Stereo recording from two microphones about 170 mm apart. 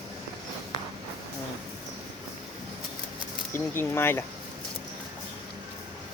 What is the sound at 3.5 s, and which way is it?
Speech, 15° left (ahead or behind).